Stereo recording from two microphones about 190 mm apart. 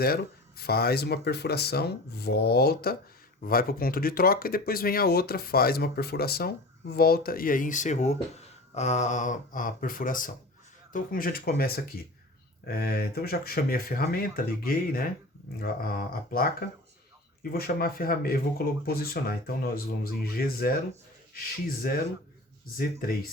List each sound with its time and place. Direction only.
0.0 s speech: 55° left (ahead or behind)